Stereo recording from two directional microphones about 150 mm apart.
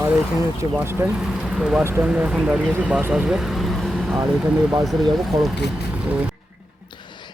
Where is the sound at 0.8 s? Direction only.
15° right (ahead or behind).